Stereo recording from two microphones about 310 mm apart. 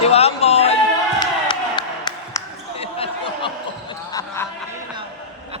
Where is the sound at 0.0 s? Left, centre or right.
Centre.